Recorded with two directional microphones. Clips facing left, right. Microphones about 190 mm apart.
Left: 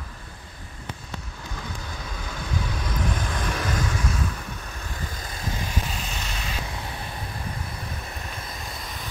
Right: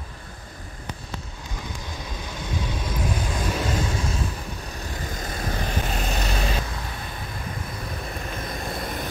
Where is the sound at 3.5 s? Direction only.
25° right (ahead or behind).